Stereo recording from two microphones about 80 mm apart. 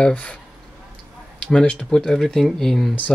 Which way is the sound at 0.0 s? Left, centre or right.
Centre.